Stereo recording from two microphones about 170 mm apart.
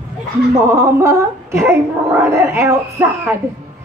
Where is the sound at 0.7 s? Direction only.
15° right (ahead or behind).